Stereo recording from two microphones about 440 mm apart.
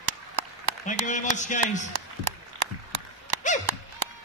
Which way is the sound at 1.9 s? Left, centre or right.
Right.